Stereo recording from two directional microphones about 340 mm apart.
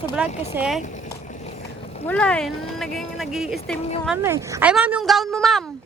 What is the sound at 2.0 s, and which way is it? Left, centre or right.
Speech, centre.